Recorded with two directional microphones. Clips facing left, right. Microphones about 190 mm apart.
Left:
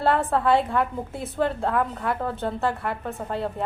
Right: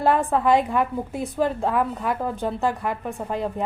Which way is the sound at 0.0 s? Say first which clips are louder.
Right 2 dB; 15° right (ahead or behind).